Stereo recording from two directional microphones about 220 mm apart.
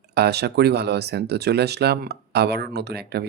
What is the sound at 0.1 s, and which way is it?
Speech, 50° right (ahead or behind).